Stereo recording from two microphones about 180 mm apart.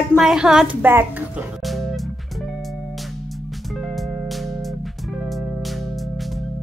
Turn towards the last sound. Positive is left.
turn(degrees=0)  # may be behind; listen again after turning